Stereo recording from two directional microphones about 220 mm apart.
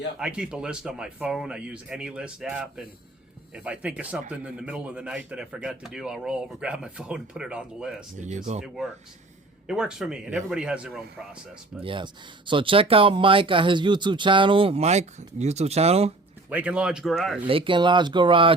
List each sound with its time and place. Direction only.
0.2 s speech: 5° right (ahead or behind)
11.8 s speech: 20° right (ahead or behind)
16.5 s speech: 5° right (ahead or behind)
17.4 s speech: 20° right (ahead or behind)